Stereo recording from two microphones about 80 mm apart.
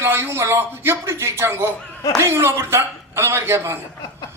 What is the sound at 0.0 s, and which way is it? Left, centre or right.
Speech, right.